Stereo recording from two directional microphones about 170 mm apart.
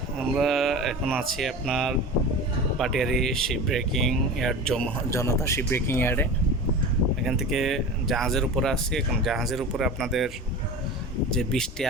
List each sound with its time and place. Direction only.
0.3 s speech: centre (ahead or behind)
5.1 s speech: 15° left (ahead or behind)
7.3 s speech: centre (ahead or behind)